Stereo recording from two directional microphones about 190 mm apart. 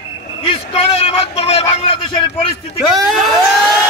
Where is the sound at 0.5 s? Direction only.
30° left (ahead or behind).